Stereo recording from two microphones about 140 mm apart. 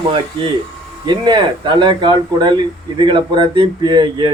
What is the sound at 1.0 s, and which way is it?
Speech, 30° right (ahead or behind).